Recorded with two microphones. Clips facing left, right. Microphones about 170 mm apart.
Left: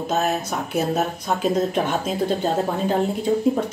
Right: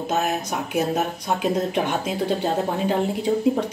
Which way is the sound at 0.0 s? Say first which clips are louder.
Left 1 dB; 10° right (ahead or behind).